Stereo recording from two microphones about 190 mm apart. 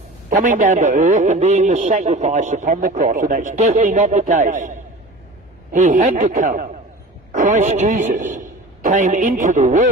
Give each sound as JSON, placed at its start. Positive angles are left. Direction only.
{"t": 0.3, "sound": "a man's voice", "side_deg": -45}